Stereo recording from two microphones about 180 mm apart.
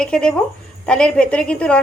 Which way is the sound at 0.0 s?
5° left (ahead or behind).